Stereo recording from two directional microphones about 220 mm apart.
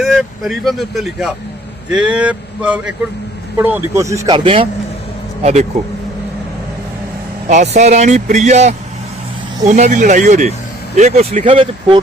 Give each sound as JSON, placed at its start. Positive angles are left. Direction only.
{"t": 0.0, "sound": "a man's voice", "side_deg": 0}
{"t": 7.4, "sound": "speech", "side_deg": -30}